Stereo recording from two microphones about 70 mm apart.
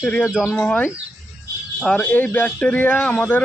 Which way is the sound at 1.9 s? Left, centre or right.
Left.